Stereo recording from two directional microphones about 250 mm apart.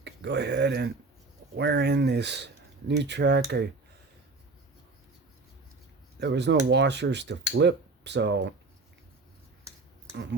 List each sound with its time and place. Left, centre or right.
0.0 s speech: right
6.1 s speech: right